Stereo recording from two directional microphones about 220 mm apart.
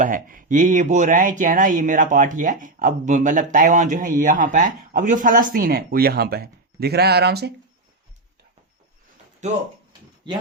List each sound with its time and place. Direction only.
0.0 s speech: 40° right (ahead or behind)
9.4 s speech: 30° right (ahead or behind)